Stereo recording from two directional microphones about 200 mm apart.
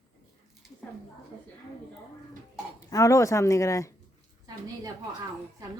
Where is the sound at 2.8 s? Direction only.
15° left (ahead or behind).